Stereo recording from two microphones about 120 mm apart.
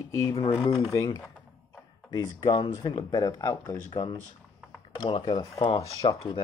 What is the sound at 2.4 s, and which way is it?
Speech, 40° left (ahead or behind).